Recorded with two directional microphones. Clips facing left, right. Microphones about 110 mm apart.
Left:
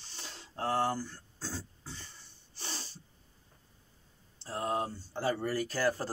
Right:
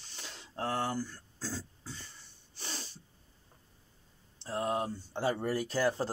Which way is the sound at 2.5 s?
25° left (ahead or behind).